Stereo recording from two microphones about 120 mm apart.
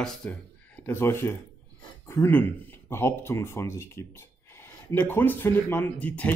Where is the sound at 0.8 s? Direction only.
20° left (ahead or behind).